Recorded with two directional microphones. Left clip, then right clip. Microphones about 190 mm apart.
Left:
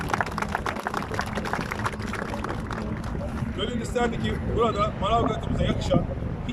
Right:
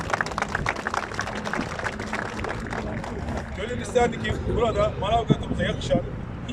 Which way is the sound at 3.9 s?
5° left (ahead or behind).